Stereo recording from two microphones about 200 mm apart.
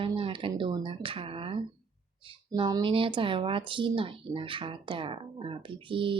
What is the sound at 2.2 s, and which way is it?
Speech, 25° right (ahead or behind).